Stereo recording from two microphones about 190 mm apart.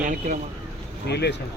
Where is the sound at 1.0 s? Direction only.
60° left (ahead or behind).